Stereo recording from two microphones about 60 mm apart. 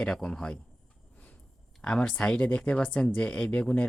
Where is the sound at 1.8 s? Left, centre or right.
Centre.